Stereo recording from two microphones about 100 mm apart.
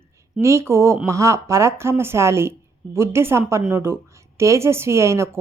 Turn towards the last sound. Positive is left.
turn(degrees=-30)  # may be behind; listen again after turning